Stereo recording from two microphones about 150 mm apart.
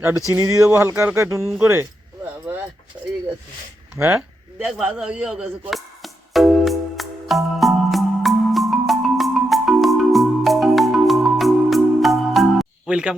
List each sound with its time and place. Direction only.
0.3 s speech: 20° right (ahead or behind)
3.9 s speech: 15° right (ahead or behind)
4.6 s music: 5° right (ahead or behind)